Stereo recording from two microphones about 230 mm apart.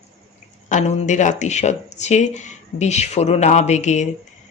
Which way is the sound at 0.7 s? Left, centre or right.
Left.